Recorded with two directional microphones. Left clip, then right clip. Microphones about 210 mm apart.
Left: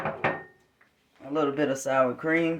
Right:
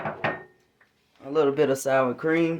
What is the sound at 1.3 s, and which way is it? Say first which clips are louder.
Speech: right 4 dB; 50° right (ahead or behind).